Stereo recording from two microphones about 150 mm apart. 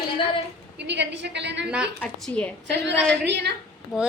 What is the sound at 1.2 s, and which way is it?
Speech, 90° right.